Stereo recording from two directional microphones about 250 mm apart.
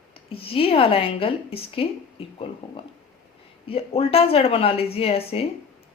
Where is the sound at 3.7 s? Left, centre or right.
Left.